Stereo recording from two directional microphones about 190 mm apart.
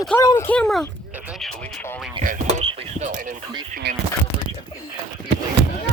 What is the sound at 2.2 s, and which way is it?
Speech, 45° right (ahead or behind).